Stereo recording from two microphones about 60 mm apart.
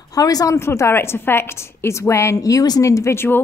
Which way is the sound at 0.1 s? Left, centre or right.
Left.